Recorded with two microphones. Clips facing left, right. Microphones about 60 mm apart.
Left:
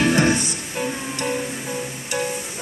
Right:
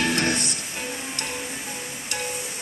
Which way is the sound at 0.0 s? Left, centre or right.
Centre.